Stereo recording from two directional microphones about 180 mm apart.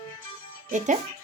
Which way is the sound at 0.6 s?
40° right (ahead or behind).